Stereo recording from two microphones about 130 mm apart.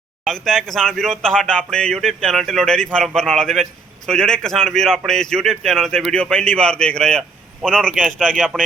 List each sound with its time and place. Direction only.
0.3 s speech: centre (ahead or behind)